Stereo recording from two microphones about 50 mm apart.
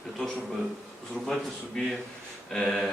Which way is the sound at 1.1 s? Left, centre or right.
Centre.